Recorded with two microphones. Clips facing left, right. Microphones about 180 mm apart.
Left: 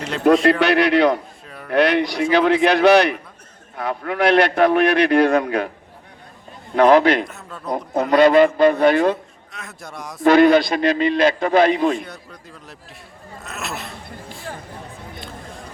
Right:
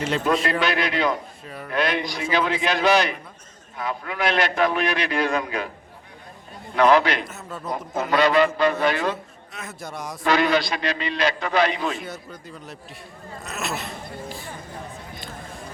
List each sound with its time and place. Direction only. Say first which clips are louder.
0.3 s a man's voice: left 10 dB; 65° left (ahead or behind)
1.5 s speech: right 2 dB; centre (ahead or behind)
1.7 s a man's voice: left 8 dB; 65° left (ahead or behind)
6.7 s a man's voice: left 5 dB; 50° left (ahead or behind)
7.3 s speech: left 3 dB; centre (ahead or behind)
8.1 s a man's voice: left 6 dB; 50° left (ahead or behind)
9.5 s speech: right 2 dB; centre (ahead or behind)
10.2 s a man's voice: left 8 dB; 50° left (ahead or behind)
11.9 s speech: left 2 dB; centre (ahead or behind)